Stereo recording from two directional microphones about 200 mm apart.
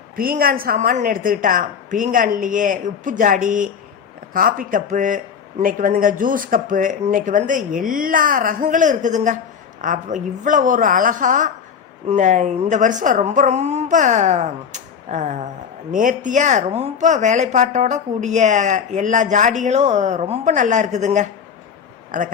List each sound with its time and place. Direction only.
0.2 s a woman's voice: 45° right (ahead or behind)